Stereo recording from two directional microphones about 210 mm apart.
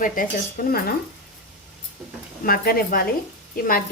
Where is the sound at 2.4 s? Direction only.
45° left (ahead or behind).